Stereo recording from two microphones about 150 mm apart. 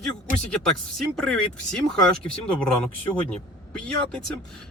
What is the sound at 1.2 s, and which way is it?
Speech, 5° left (ahead or behind).